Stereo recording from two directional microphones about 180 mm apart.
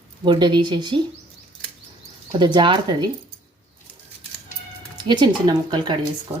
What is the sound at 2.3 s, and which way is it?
Speech, 25° right (ahead or behind).